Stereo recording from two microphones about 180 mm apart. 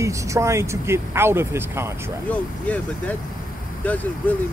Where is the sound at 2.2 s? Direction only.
10° left (ahead or behind).